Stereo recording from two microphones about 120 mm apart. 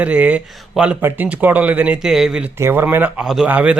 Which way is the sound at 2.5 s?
20° right (ahead or behind).